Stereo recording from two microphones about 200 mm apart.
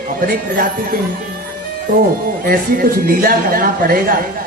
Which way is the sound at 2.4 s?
45° right (ahead or behind).